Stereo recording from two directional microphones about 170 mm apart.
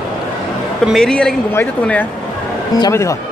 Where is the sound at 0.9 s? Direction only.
5° left (ahead or behind).